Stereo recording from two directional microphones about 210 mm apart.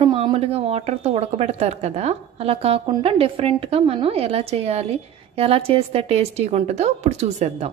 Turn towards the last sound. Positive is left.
turn(degrees=-30)  # may be behind; listen again after turning